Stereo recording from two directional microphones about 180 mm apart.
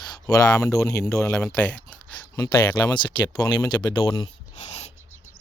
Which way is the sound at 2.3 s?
20° left (ahead or behind).